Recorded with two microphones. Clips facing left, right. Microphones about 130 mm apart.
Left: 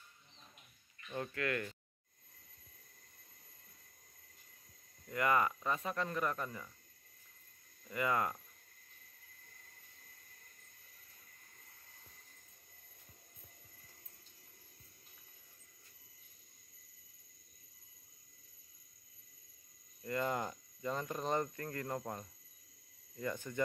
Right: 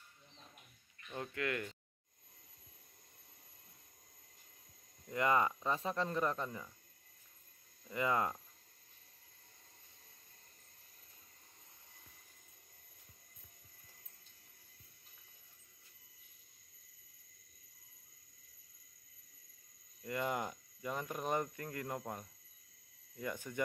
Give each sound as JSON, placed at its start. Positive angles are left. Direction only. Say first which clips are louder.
{"t": 1.0, "sound": "speech", "louder": "left 1 dB", "side_deg": -15}
{"t": 5.0, "sound": "speech", "louder": "even", "side_deg": -25}
{"t": 7.9, "sound": "speech", "louder": "even", "side_deg": -20}
{"t": 20.0, "sound": "speech", "louder": "left 1 dB", "side_deg": -15}